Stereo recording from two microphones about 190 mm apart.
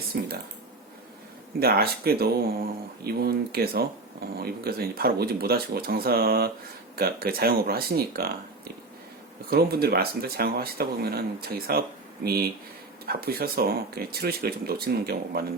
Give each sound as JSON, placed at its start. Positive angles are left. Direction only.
{"t": 0.1, "sound": "speech", "side_deg": -55}
{"t": 1.5, "sound": "speech", "side_deg": -55}